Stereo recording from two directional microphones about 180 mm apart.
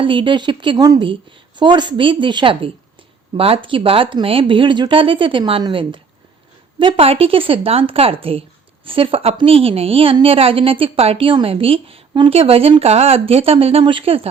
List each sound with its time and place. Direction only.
0.0 s a woman's voice: 25° right (ahead or behind)